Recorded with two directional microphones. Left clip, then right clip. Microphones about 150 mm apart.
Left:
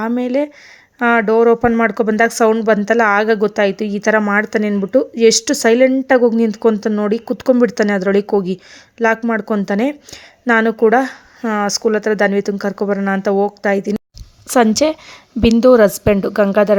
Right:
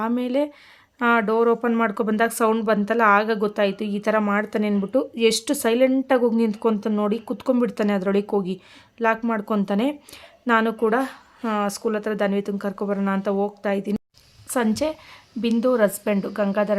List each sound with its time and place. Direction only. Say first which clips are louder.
0.0 s a woman's voice: left 6 dB; 25° left (ahead or behind)
14.5 s a woman's voice: left 10 dB; 45° left (ahead or behind)